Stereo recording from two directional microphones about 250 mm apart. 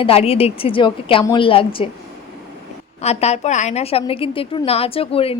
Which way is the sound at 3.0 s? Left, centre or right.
Left.